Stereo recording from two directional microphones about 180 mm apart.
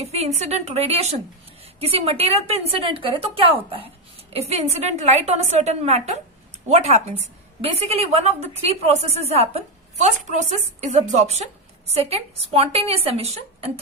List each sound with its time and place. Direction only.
0.0 s a woman's voice: 35° right (ahead or behind)